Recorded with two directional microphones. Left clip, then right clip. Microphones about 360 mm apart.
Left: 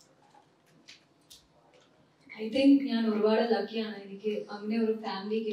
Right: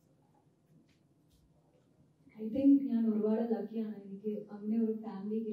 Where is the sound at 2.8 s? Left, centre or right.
Centre.